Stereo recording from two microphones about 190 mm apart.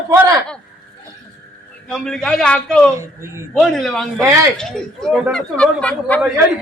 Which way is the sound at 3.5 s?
Centre (ahead or behind).